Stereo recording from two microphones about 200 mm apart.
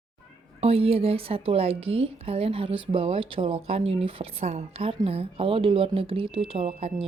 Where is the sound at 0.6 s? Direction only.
30° right (ahead or behind).